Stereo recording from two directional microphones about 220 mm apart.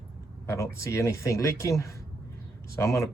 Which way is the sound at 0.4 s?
15° left (ahead or behind).